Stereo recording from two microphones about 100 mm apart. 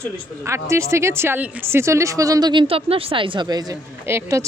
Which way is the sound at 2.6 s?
70° right (ahead or behind).